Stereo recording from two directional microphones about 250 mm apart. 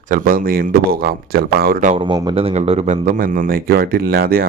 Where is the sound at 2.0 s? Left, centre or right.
Centre; by 4.5 s right.